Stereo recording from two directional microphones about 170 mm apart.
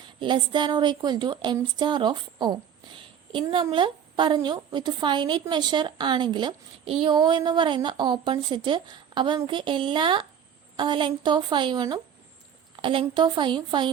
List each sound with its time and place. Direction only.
0.2 s a woman's voice: 25° right (ahead or behind)